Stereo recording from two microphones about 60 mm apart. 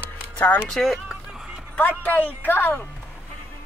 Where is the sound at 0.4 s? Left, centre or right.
Left.